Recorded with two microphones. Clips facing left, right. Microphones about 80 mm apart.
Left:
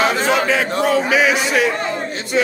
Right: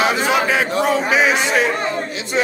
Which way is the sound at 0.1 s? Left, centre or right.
Centre.